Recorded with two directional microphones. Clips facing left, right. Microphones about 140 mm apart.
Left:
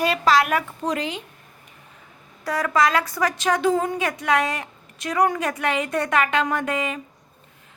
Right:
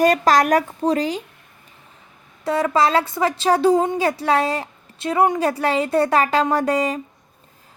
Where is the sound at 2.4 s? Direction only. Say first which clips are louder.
Right 3 dB; 25° right (ahead or behind).